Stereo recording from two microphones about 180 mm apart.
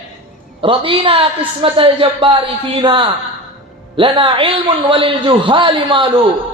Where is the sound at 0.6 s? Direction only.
30° right (ahead or behind).